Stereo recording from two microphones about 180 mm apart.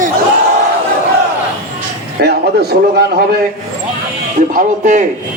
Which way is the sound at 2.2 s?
65° right (ahead or behind).